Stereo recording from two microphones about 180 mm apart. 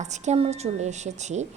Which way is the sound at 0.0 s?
40° right (ahead or behind).